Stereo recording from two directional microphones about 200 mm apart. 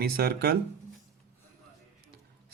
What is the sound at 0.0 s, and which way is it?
Speech, 50° right (ahead or behind).